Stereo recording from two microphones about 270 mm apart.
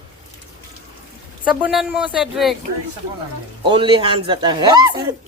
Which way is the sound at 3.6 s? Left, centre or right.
Centre.